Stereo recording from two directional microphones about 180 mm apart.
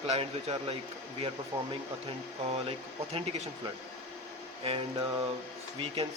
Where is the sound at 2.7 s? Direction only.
35° right (ahead or behind).